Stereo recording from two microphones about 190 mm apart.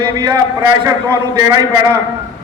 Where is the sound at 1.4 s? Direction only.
15° right (ahead or behind).